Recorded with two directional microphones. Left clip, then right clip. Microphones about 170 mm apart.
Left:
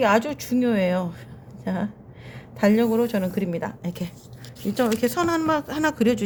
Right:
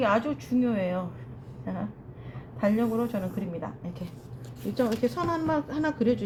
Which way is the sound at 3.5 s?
90° left.